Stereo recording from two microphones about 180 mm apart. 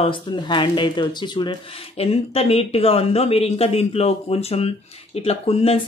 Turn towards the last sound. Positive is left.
turn(degrees=35)  # may be behind; listen again after turning